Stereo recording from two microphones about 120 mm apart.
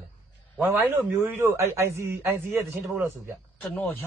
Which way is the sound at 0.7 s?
20° right (ahead or behind).